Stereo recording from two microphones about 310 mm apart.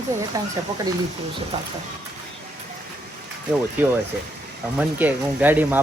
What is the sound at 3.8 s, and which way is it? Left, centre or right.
Speech, centre.